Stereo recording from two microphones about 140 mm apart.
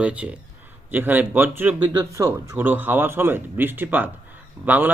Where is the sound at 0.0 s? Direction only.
10° right (ahead or behind).